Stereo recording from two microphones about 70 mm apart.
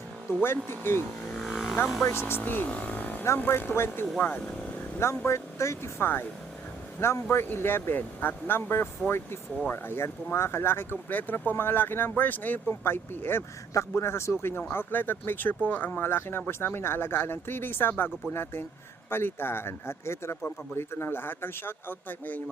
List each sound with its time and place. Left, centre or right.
0.4 s speech: left
1.5 s vehicle: centre
2.0 s speech: left
10.9 s speech: left
19.1 s speech: left